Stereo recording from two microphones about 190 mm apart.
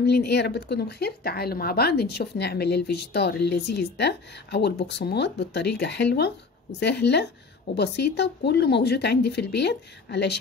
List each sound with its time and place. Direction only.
0.0 s speech: 60° left (ahead or behind)